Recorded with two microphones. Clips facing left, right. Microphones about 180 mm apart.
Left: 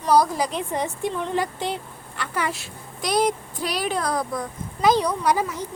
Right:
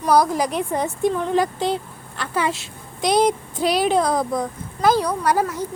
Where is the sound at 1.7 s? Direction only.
15° left (ahead or behind).